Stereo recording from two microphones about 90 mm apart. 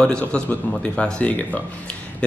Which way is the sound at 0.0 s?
10° left (ahead or behind).